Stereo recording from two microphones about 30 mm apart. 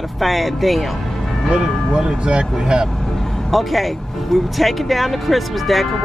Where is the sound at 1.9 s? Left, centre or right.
Right.